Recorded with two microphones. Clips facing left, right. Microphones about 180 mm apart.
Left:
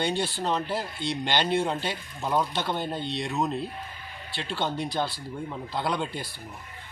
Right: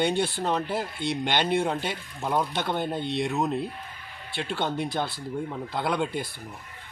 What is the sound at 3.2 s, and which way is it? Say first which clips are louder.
Speech: even; 10° right (ahead or behind).